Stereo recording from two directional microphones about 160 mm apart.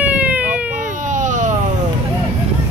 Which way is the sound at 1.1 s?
55° right (ahead or behind).